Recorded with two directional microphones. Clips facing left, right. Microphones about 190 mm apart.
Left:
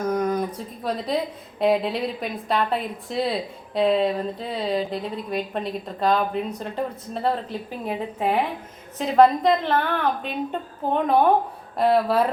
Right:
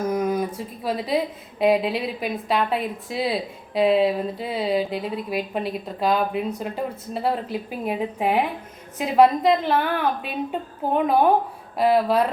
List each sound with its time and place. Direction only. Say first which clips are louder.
0.0 s a woman's voice: even; 5° right (ahead or behind)